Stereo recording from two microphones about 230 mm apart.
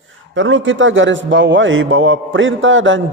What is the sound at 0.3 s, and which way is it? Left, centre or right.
A man's voice, right.